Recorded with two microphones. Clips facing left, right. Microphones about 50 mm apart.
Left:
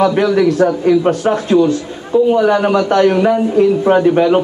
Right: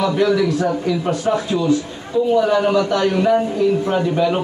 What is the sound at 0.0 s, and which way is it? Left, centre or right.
A man's voice, left.